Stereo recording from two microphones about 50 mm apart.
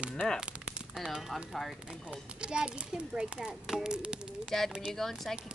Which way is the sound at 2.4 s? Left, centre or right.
Centre.